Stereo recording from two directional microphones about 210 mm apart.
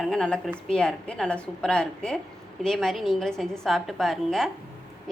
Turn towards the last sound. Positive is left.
turn(degrees=0)  # may be behind; listen again after turning